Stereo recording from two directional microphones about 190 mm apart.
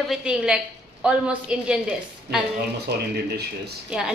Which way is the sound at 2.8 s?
60° right (ahead or behind).